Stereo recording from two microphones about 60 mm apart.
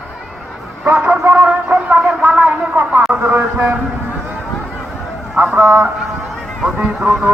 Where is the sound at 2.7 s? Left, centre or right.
Right.